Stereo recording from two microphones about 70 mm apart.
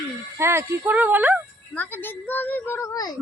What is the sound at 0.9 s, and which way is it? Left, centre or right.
Speech, right.